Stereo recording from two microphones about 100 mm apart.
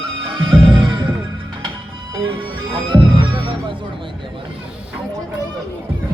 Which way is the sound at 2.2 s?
55° right (ahead or behind).